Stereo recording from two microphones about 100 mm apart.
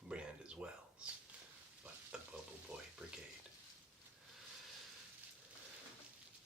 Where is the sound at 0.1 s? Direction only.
10° right (ahead or behind).